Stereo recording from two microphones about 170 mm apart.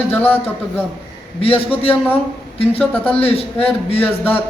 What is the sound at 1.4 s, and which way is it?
A man's voice, 35° left (ahead or behind).